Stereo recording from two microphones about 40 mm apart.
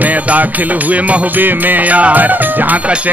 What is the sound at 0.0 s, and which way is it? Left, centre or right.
Music, right.